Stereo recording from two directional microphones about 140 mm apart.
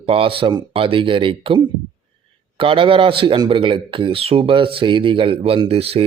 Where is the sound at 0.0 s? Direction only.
40° right (ahead or behind).